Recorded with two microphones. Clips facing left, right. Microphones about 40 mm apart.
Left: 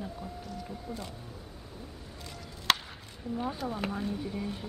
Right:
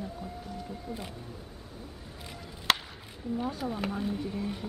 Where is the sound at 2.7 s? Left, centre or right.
Centre.